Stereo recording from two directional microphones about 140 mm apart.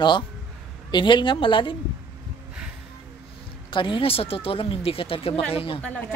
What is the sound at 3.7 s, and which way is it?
Speech, 35° left (ahead or behind).